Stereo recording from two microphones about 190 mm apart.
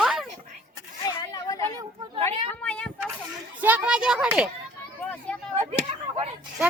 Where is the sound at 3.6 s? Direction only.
5° right (ahead or behind).